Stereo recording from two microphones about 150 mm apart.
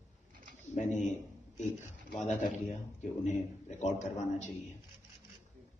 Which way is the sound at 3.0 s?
50° left (ahead or behind).